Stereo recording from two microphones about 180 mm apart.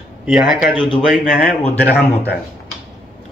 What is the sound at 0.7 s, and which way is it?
Speech, 25° left (ahead or behind).